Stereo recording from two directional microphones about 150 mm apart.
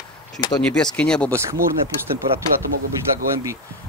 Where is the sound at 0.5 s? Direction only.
5° left (ahead or behind).